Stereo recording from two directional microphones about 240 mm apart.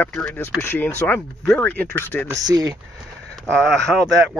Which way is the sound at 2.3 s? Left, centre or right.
Centre.